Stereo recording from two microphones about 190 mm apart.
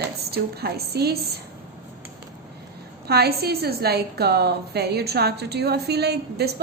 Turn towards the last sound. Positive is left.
turn(degrees=-60)  # may be behind; listen again after turning